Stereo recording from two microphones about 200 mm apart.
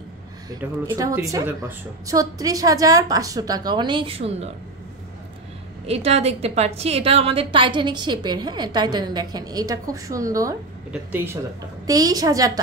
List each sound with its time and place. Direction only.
0.5 s a woman's voice: 15° right (ahead or behind)
5.9 s a woman's voice: 30° right (ahead or behind)